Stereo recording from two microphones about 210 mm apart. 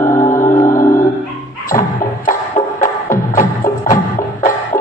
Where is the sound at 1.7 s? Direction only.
15° left (ahead or behind).